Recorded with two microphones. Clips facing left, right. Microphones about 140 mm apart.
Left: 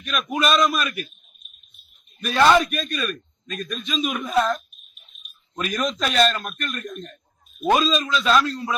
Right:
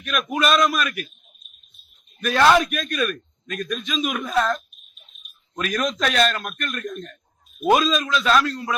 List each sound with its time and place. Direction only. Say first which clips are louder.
0.0 s speech: right 1 dB; centre (ahead or behind)
2.2 s speech: even; centre (ahead or behind)
5.5 s speech: right 1 dB; centre (ahead or behind)